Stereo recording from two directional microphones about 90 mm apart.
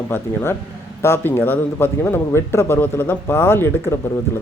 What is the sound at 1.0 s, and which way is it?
A man's voice, 25° left (ahead or behind).